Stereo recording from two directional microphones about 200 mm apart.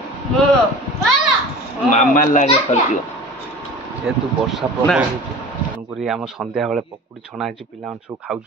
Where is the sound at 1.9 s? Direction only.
40° left (ahead or behind).